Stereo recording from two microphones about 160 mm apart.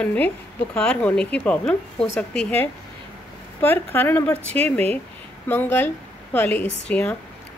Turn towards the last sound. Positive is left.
turn(degrees=90)